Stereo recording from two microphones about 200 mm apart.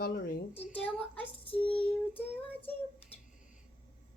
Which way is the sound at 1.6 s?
10° left (ahead or behind).